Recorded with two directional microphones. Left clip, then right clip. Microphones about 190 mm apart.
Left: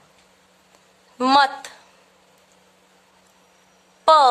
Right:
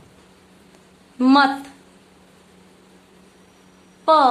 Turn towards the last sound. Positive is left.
turn(degrees=30)  # may be behind; listen again after turning